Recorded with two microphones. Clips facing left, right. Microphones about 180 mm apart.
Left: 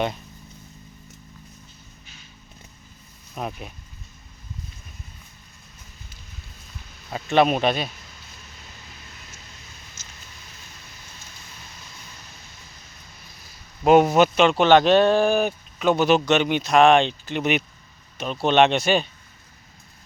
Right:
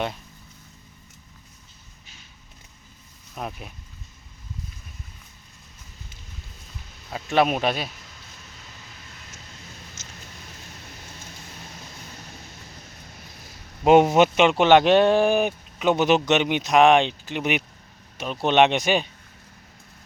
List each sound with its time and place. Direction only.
3.3 s speech: centre (ahead or behind)
7.1 s speech: 5° right (ahead or behind)
10.0 s a sound: 25° right (ahead or behind)
13.8 s speech: 25° right (ahead or behind)